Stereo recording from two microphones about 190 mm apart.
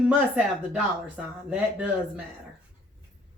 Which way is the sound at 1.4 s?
5° right (ahead or behind).